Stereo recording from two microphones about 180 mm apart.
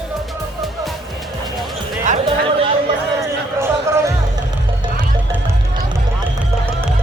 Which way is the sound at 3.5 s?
15° right (ahead or behind).